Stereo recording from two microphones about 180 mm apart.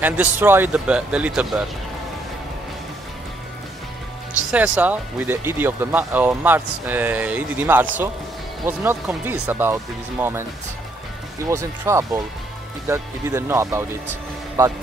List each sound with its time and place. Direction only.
0.0 s speech: 10° right (ahead or behind)
4.5 s speech: 5° right (ahead or behind)